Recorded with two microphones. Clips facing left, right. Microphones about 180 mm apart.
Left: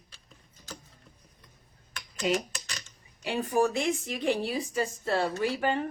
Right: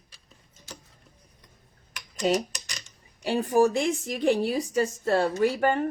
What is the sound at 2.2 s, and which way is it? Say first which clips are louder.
A woman's voice: right 4 dB; 35° right (ahead or behind).